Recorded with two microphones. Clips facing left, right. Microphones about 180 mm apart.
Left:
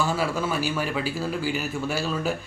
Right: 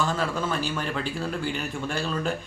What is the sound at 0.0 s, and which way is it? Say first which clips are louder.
A man's voice: left 1 dB; 10° left (ahead or behind).